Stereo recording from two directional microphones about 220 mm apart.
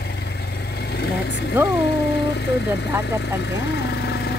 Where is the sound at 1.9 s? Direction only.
50° left (ahead or behind).